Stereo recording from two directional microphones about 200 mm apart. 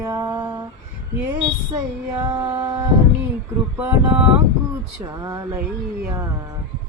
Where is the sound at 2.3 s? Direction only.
15° right (ahead or behind).